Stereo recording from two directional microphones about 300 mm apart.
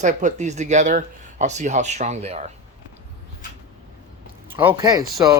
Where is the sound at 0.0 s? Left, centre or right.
Right.